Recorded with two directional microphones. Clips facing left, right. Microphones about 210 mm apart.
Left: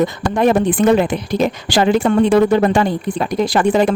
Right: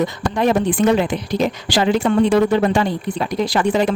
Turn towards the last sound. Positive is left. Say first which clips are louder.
# left 3 dB
turn(degrees=50)  # may be behind; listen again after turning